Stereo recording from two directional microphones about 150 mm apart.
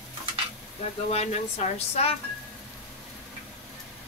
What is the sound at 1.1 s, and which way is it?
Speech, 45° left (ahead or behind).